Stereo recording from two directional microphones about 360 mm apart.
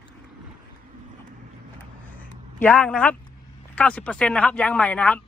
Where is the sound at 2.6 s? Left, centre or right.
Centre.